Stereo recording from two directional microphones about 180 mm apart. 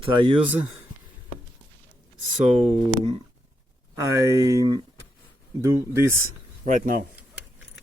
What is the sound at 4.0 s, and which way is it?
Speech, 15° right (ahead or behind).